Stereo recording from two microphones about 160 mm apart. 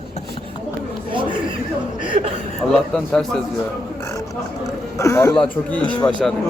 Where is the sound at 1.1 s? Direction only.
30° right (ahead or behind).